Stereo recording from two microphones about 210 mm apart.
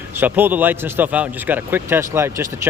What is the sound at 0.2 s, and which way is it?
Speech, 10° right (ahead or behind).